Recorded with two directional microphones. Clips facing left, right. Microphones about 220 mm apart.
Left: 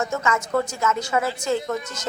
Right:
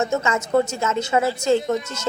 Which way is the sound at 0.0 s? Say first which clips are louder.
Right 3 dB; 25° right (ahead or behind).